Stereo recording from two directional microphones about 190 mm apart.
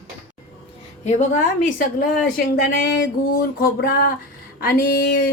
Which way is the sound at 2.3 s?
50° left (ahead or behind).